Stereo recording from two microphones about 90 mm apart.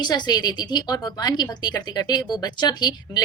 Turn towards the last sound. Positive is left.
turn(degrees=50)  # may be behind; listen again after turning